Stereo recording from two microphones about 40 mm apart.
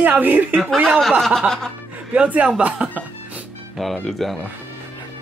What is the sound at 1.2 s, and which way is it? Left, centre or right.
Speech, centre.